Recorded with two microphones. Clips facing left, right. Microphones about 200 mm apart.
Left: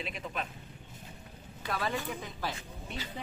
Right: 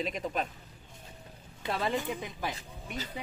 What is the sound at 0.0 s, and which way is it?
Speech, 40° right (ahead or behind).